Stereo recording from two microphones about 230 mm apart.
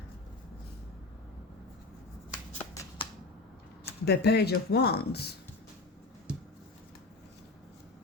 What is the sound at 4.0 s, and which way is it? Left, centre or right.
Speech, left.